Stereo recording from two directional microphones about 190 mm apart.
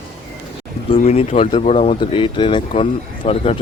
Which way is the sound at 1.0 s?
35° left (ahead or behind).